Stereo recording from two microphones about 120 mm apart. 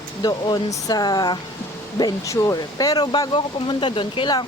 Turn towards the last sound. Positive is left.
turn(degrees=40)  # may be behind; listen again after turning